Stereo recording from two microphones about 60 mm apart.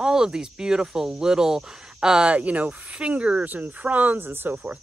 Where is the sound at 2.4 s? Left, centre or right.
Right.